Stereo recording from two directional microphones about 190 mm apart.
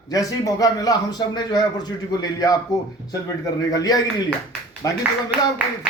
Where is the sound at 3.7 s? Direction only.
20° left (ahead or behind).